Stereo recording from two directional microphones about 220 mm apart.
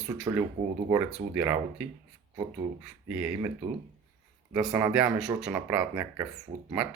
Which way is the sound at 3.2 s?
5° right (ahead or behind).